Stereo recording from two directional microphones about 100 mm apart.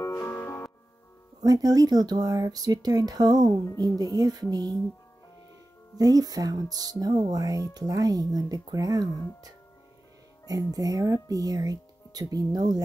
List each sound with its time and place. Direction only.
0.0 s music: 25° left (ahead or behind)
1.4 s speech: 35° right (ahead or behind)
5.9 s speech: 40° right (ahead or behind)
10.4 s speech: 35° right (ahead or behind)